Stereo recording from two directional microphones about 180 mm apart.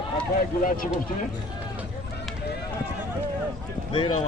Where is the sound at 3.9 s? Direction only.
30° left (ahead or behind).